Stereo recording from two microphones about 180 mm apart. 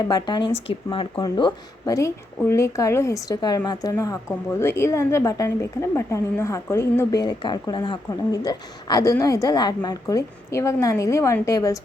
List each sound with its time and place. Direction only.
0.0 s speech: 25° left (ahead or behind)